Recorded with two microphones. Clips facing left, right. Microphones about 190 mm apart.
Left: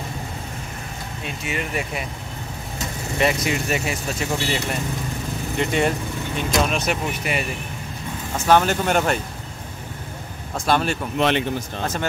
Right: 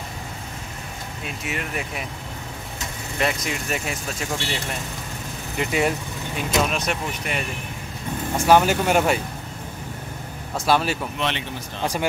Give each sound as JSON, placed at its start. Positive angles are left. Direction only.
{"t": 1.2, "sound": "speech", "side_deg": 0}
{"t": 3.2, "sound": "speech", "side_deg": 0}
{"t": 8.5, "sound": "speech", "side_deg": -10}
{"t": 10.6, "sound": "speech", "side_deg": -5}
{"t": 11.1, "sound": "speech", "side_deg": 50}
{"t": 11.8, "sound": "speech", "side_deg": -15}